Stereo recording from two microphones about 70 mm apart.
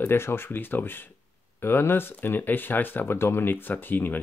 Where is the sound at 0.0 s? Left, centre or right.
Left.